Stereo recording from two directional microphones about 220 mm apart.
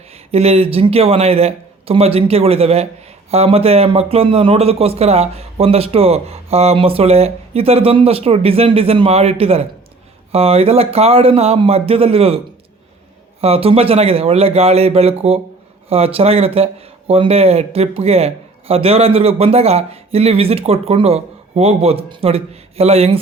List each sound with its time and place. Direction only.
0.3 s speech: 30° right (ahead or behind)
13.4 s speech: 25° right (ahead or behind)